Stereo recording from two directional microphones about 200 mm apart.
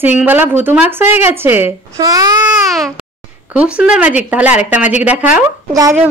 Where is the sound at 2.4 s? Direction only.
Centre (ahead or behind).